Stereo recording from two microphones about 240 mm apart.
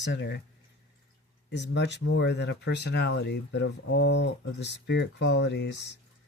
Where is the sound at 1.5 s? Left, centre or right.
Left.